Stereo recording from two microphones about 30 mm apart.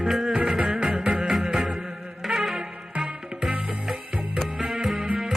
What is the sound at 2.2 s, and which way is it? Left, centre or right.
Music, centre.